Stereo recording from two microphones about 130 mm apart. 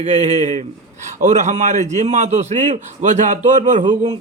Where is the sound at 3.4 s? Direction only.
70° right (ahead or behind).